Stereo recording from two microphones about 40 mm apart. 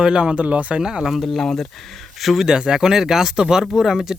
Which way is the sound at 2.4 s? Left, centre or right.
Centre.